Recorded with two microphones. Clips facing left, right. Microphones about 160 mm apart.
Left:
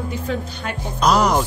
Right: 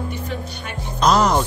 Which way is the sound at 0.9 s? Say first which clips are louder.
Even; 10° left (ahead or behind).